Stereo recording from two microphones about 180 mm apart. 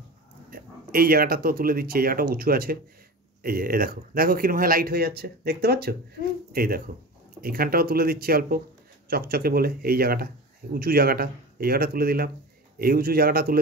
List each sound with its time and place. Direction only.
0.5 s speech: 55° right (ahead or behind)